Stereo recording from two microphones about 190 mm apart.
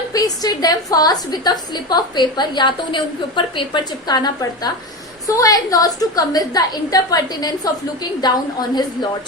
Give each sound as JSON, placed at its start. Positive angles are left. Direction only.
{"t": 0.1, "sound": "a woman's voice", "side_deg": 20}